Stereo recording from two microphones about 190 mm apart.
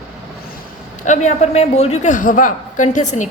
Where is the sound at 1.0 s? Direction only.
40° left (ahead or behind).